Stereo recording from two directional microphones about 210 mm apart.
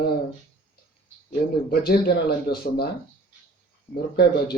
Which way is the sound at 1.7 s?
50° left (ahead or behind).